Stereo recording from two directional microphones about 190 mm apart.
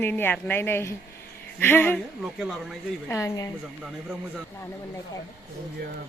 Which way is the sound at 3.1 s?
15° left (ahead or behind).